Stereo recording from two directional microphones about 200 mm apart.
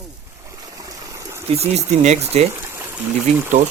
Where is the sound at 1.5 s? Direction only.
30° right (ahead or behind).